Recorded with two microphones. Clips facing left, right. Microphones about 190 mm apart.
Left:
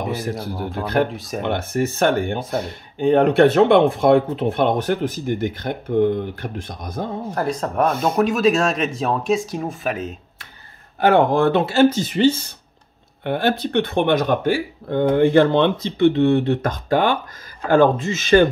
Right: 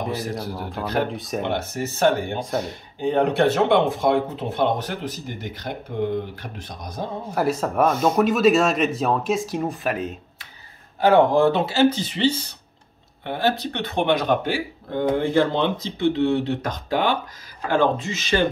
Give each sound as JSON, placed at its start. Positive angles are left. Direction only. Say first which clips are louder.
{"t": 0.3, "sound": "speech", "louder": "left 3 dB", "side_deg": 0}
{"t": 1.5, "sound": "speech", "louder": "left 5 dB", "side_deg": 55}
{"t": 7.3, "sound": "speech", "louder": "right 1 dB", "side_deg": -5}
{"t": 11.0, "sound": "speech", "louder": "even", "side_deg": 60}
{"t": 13.2, "sound": "speech", "louder": "left 3 dB", "side_deg": 60}
{"t": 15.1, "sound": "speech", "louder": "left 7 dB", "side_deg": 65}